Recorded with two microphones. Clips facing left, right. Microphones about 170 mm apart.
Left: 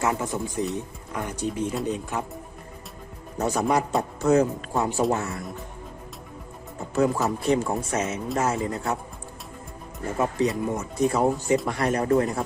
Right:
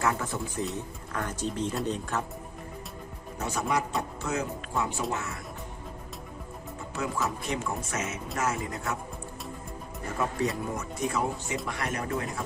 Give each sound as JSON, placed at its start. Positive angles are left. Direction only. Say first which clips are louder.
{"t": 0.0, "sound": "speech", "louder": "left 3 dB", "side_deg": 20}
{"t": 3.3, "sound": "a man's voice", "louder": "left 6 dB", "side_deg": 40}
{"t": 6.9, "sound": "a man's voice", "louder": "left 9 dB", "side_deg": 35}
{"t": 10.2, "sound": "speech", "louder": "left 5 dB", "side_deg": 20}
{"t": 10.8, "sound": "a man's voice", "louder": "left 7 dB", "side_deg": 35}